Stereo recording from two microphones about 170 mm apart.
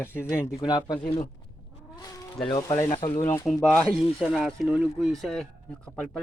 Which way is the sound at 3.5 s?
5° left (ahead or behind).